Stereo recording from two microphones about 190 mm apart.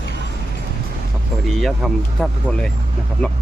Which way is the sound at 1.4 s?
Centre (ahead or behind).